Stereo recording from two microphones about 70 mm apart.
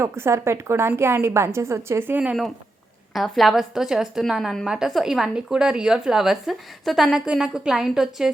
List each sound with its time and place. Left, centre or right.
0.0 s a woman's voice: right
3.1 s a woman's voice: centre